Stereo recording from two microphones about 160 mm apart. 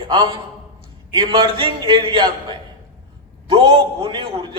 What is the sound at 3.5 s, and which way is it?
Speech, 30° right (ahead or behind).